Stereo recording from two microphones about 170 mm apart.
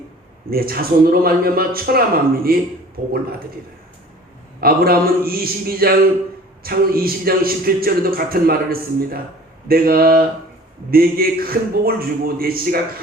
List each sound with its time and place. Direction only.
0.5 s a man's voice: 60° right (ahead or behind)
4.6 s a man's voice: 60° right (ahead or behind)